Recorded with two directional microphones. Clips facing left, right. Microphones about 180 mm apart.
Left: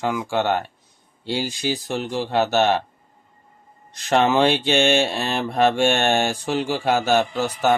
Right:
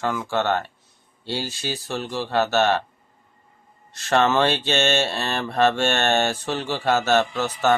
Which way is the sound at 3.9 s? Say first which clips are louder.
Left 1 dB; 15° left (ahead or behind).